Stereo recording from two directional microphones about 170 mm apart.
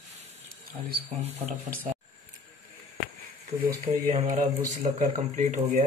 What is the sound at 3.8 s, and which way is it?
Speech, 45° right (ahead or behind).